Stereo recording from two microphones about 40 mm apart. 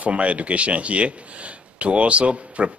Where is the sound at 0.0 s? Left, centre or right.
Right.